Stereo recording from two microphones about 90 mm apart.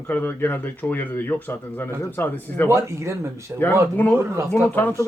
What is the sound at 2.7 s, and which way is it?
Speech, 30° right (ahead or behind).